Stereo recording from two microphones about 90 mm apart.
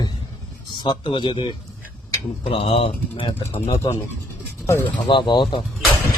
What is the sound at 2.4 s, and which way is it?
Speech, 90° left.